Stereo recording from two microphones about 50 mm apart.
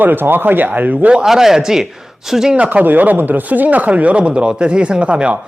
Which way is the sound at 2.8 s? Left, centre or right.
Right.